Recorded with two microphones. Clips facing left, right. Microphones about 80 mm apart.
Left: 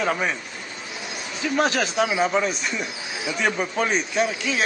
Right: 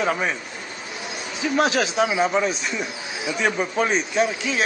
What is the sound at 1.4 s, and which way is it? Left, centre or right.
Speech, centre.